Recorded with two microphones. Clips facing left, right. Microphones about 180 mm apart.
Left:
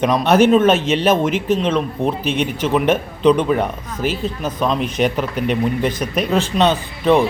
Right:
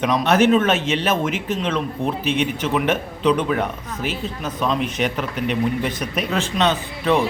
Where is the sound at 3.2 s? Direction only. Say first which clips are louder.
Left 5 dB; 35° left (ahead or behind).